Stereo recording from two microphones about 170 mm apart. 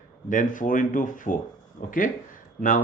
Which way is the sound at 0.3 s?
50° left (ahead or behind).